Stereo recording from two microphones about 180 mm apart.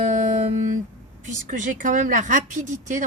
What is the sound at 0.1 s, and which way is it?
Music, 45° right (ahead or behind).